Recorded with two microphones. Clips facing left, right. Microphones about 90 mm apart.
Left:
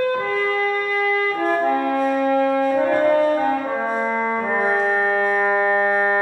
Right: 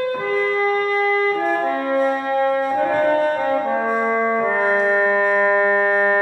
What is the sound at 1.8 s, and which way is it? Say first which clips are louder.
Music: even; 25° right (ahead or behind).